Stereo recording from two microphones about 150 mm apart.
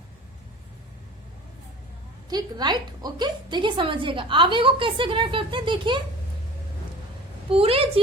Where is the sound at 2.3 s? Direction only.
25° right (ahead or behind).